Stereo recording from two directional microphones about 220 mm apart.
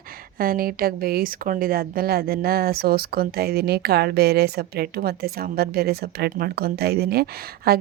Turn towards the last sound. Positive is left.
turn(degrees=-45)  # may be behind; listen again after turning